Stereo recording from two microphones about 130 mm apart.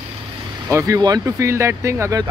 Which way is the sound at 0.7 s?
20° right (ahead or behind).